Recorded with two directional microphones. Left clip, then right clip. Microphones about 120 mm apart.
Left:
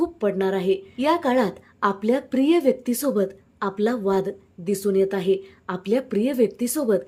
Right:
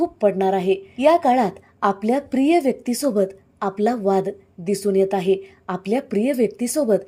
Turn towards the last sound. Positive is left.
turn(degrees=-15)  # may be behind; listen again after turning